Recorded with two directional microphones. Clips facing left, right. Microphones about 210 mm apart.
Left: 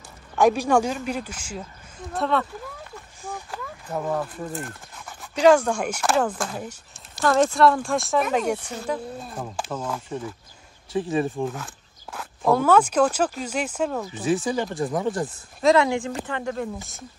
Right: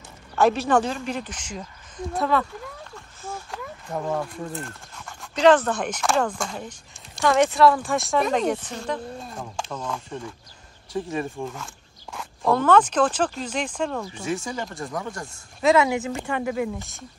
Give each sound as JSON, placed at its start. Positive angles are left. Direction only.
{"t": 0.4, "sound": "speech", "side_deg": 10}
{"t": 3.4, "sound": "speech", "side_deg": 0}
{"t": 10.9, "sound": "speech", "side_deg": 15}
{"t": 11.4, "sound": "speech", "side_deg": 0}
{"t": 14.3, "sound": "speech", "side_deg": 15}
{"t": 15.2, "sound": "speech", "side_deg": 0}